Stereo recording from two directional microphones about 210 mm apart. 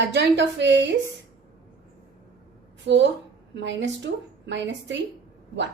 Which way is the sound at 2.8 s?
55° right (ahead or behind).